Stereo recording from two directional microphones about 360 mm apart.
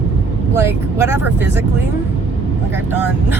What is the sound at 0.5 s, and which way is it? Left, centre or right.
Speech, centre.